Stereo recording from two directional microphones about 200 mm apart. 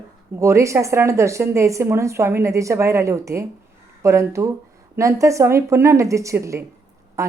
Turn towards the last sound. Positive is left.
turn(degrees=-15)  # may be behind; listen again after turning